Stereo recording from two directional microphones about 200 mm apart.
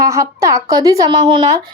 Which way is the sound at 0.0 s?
15° right (ahead or behind).